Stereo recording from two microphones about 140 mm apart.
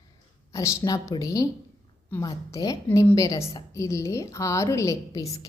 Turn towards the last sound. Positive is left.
turn(degrees=25)  # may be behind; listen again after turning